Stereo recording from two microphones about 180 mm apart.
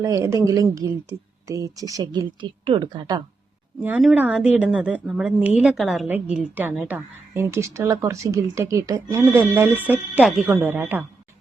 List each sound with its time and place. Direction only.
0.0 s a woman's voice: 15° right (ahead or behind)
3.8 s a woman's voice: 10° right (ahead or behind)